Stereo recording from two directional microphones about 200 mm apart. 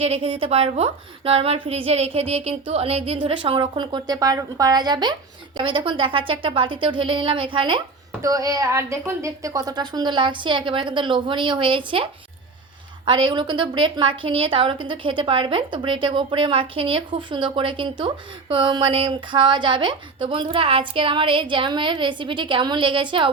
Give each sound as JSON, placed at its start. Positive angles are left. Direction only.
{"t": 0.0, "sound": "a woman's voice", "side_deg": -30}
{"t": 13.1, "sound": "a woman's voice", "side_deg": -25}